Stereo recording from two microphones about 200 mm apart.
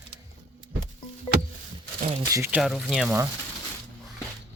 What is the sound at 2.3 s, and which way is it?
Speech, 10° right (ahead or behind).